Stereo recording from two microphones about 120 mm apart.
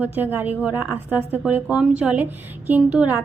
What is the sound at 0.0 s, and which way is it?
A woman's voice, 15° right (ahead or behind).